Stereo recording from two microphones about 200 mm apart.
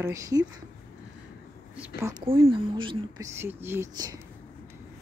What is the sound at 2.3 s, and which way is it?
Speech, 25° right (ahead or behind).